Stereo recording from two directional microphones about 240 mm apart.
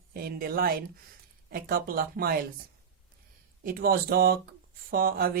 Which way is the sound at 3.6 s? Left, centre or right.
Right.